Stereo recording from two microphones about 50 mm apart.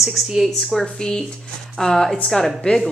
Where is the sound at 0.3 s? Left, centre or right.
Centre.